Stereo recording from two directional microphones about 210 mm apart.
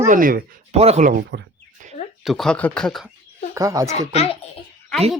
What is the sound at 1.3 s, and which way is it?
Speech, 55° right (ahead or behind).